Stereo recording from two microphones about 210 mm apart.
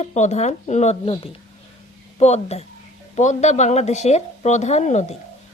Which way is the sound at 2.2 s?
30° left (ahead or behind).